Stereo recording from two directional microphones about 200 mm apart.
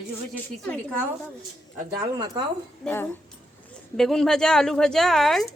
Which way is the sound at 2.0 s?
20° right (ahead or behind).